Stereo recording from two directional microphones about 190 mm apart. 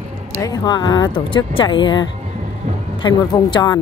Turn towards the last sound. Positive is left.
turn(degrees=20)  # may be behind; listen again after turning